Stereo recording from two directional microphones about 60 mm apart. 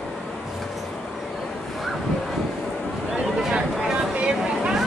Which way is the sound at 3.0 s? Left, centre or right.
Centre.